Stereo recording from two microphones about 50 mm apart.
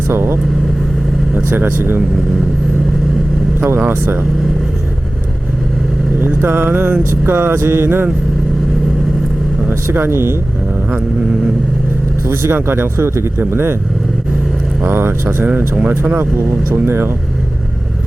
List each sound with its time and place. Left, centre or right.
0.1 s speech: right
1.5 s speech: right
3.8 s speech: right
6.2 s speech: right
9.9 s speech: right
12.3 s speech: right
13.0 s speech: right
13.4 s speech: right
14.8 s speech: right
16.7 s speech: right